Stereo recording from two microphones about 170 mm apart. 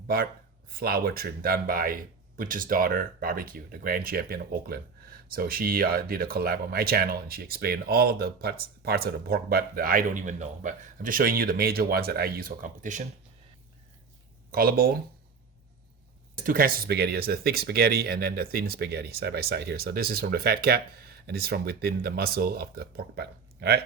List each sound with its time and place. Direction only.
0.1 s speech: 60° right (ahead or behind)
14.5 s speech: 60° right (ahead or behind)
16.4 s speech: 55° right (ahead or behind); by 23.8 s 75° right (ahead or behind)